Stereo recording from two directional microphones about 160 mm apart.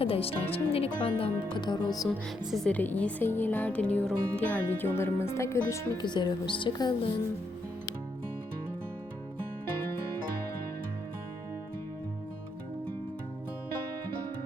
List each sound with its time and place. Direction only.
0.0 s speech: 35° left (ahead or behind)
2.5 s speech: 5° left (ahead or behind); by 7.1 s 30° left (ahead or behind)